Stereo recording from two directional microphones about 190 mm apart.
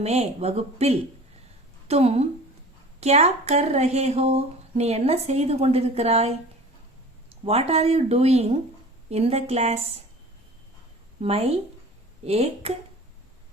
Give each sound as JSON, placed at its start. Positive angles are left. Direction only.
{"t": 0.0, "sound": "speech", "side_deg": -35}
{"t": 7.4, "sound": "speech", "side_deg": -35}
{"t": 11.2, "sound": "speech", "side_deg": -35}